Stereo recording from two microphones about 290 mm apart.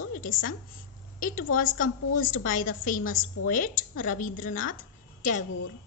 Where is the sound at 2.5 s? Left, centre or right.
Left.